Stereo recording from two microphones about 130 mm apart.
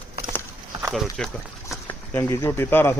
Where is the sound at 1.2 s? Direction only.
5° left (ahead or behind).